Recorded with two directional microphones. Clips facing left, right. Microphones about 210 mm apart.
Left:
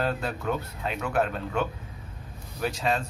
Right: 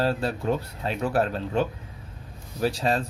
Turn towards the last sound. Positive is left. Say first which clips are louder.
# right 3 dB
turn(degrees=-35)  # may be behind; listen again after turning